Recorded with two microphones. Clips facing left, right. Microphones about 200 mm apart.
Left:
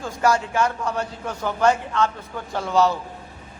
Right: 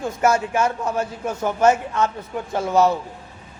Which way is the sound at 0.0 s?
20° right (ahead or behind).